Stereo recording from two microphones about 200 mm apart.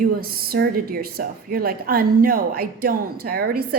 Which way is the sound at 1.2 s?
50° right (ahead or behind).